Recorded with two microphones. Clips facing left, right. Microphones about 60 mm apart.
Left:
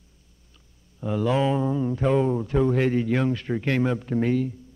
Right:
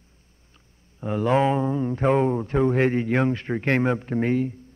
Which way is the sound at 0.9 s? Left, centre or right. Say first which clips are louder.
Right 2 dB; right.